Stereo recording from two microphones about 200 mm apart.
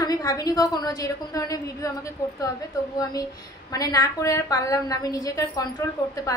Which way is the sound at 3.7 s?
20° left (ahead or behind).